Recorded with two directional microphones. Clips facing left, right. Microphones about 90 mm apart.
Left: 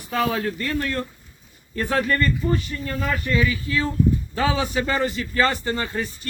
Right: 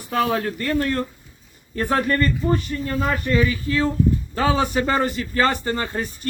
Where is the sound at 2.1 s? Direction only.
35° right (ahead or behind).